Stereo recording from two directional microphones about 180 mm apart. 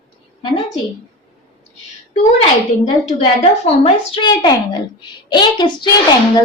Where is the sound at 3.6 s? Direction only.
30° left (ahead or behind).